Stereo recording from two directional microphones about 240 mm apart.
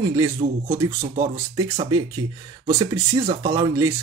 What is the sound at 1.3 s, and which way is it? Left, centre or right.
Speech, centre.